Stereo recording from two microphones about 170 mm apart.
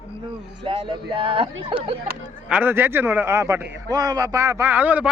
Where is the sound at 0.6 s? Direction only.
30° right (ahead or behind).